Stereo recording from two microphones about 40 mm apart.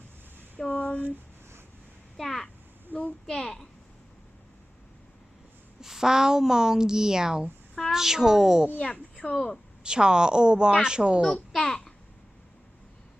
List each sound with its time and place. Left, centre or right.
0.7 s a sound: left
2.1 s a child's voice: centre
2.9 s a child's voice: right
3.2 s a child's voice: centre
5.8 s a woman's voice: centre
8.8 s speech: left
9.8 s speech: centre
11.5 s babbling: centre